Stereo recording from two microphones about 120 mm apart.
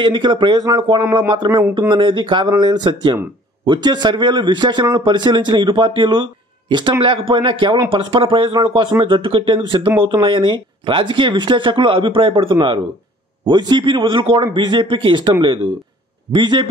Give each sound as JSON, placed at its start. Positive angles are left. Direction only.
{"t": 0.0, "sound": "a man's voice", "side_deg": -40}